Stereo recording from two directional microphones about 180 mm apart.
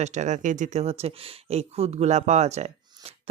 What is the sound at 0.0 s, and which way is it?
A woman's voice, 40° right (ahead or behind).